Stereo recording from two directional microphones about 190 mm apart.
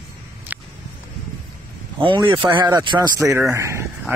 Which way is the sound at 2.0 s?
25° right (ahead or behind).